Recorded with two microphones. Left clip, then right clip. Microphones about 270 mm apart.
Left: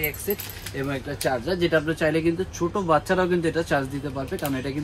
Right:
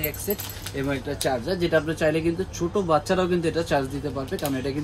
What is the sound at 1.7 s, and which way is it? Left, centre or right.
Speech, centre.